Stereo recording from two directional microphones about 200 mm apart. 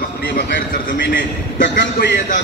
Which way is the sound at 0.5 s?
60° left (ahead or behind).